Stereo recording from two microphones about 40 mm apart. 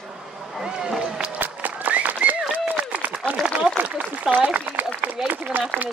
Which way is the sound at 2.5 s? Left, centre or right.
Right.